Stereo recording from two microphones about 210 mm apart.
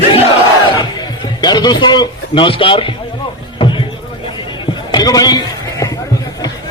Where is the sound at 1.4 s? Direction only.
20° left (ahead or behind).